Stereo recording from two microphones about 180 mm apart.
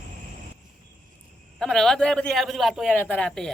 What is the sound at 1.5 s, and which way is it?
Speech, centre (ahead or behind).